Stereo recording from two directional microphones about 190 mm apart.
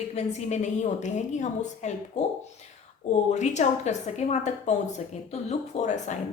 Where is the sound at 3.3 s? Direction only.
40° left (ahead or behind).